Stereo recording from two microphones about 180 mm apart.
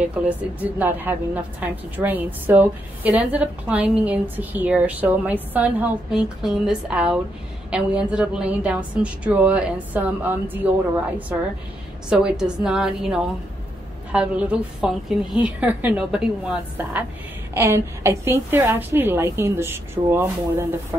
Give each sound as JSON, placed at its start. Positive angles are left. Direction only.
{"t": 0.1, "sound": "a woman's voice", "side_deg": -10}
{"t": 12.1, "sound": "a woman's voice", "side_deg": -5}
{"t": 17.6, "sound": "a woman's voice", "side_deg": -15}